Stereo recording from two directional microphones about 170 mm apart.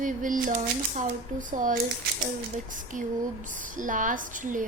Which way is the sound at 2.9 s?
50° right (ahead or behind).